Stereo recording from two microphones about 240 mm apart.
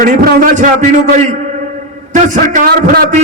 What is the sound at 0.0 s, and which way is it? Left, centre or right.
A man's voice, right.